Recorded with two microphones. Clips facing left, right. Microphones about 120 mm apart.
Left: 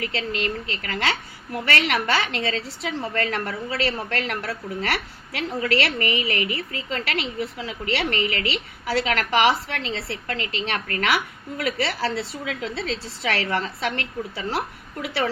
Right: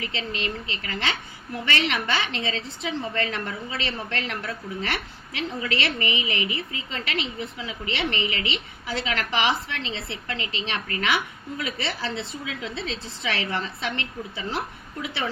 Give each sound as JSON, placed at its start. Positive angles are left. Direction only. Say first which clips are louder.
{"t": 0.0, "sound": "a woman's voice", "louder": "left 4 dB", "side_deg": 45}